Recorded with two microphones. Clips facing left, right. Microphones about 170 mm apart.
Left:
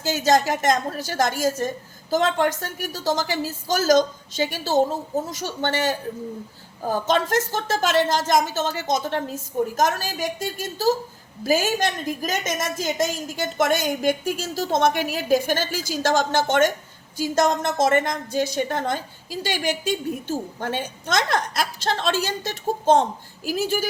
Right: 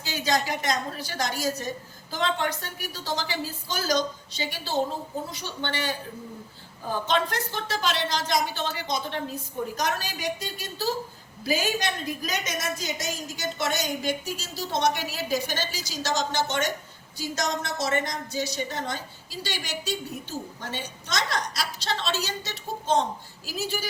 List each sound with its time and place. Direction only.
0.0 s a woman's voice: 45° left (ahead or behind)